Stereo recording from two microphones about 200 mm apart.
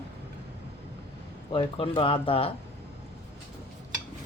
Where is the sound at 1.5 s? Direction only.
25° left (ahead or behind).